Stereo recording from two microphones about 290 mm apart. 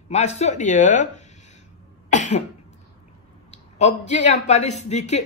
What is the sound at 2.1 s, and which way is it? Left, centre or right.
Cough, left.